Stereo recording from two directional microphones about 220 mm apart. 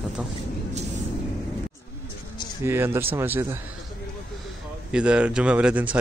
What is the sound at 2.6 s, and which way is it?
A man's voice, 10° right (ahead or behind).